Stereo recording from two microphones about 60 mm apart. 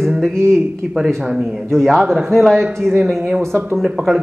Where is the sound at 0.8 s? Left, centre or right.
Centre.